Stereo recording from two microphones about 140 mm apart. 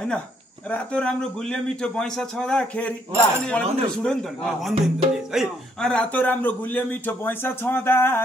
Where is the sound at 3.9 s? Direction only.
5° left (ahead or behind).